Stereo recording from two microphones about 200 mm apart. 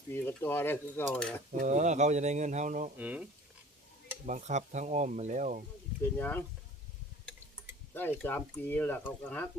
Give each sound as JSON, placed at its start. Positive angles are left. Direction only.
{"t": 0.1, "sound": "cutlery", "side_deg": 10}
{"t": 1.6, "sound": "speech", "side_deg": -35}
{"t": 3.0, "sound": "speech", "side_deg": -5}
{"t": 4.3, "sound": "speech", "side_deg": -35}
{"t": 6.0, "sound": "cutlery", "side_deg": 10}
{"t": 8.2, "sound": "cutlery", "side_deg": 10}